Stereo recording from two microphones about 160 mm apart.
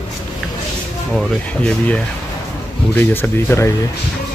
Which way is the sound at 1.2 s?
5° left (ahead or behind).